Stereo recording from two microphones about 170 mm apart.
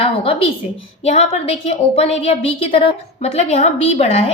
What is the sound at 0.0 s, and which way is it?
A woman's voice, 35° left (ahead or behind).